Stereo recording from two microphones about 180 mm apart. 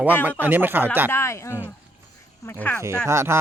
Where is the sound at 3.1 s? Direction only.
15° right (ahead or behind).